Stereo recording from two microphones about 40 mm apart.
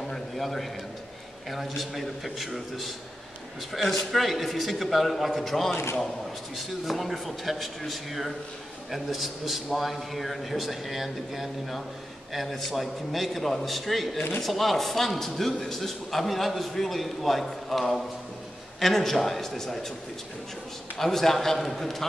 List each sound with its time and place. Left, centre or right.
0.0 s a sound: centre
1.5 s a man's voice: centre
21.0 s a man's voice: centre